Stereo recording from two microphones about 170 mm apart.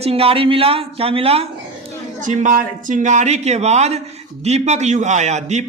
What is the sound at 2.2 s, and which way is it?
A man's voice, 45° right (ahead or behind).